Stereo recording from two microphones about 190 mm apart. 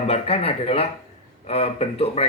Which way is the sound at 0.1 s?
30° left (ahead or behind).